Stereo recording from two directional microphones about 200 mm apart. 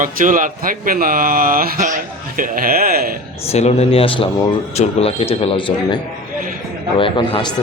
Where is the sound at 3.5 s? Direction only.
30° left (ahead or behind).